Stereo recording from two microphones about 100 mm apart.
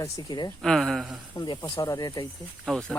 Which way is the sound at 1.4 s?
45° left (ahead or behind).